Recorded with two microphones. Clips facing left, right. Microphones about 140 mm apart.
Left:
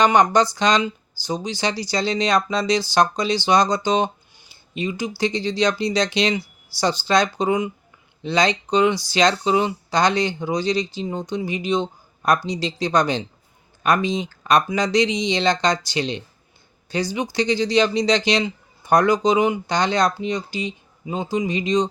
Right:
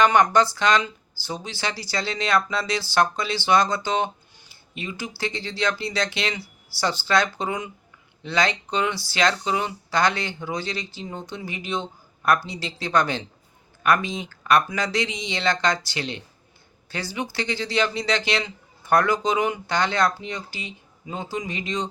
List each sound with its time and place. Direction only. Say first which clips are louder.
0.0 s speech: left 2 dB; 20° left (ahead or behind)